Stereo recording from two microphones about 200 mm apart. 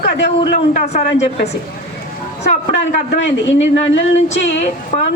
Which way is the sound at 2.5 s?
35° left (ahead or behind).